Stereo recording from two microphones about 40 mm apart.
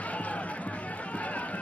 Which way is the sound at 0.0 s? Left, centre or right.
Left.